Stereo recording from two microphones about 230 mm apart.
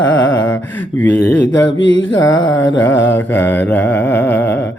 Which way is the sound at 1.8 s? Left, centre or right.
Left.